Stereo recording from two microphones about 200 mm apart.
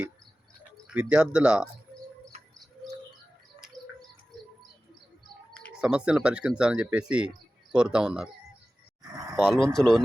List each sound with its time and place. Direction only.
0.9 s speech: 5° right (ahead or behind)
5.5 s speech: centre (ahead or behind)
9.3 s speech: centre (ahead or behind)